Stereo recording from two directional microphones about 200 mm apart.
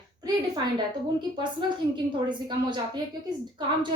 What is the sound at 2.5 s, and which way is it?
Speech, 20° right (ahead or behind).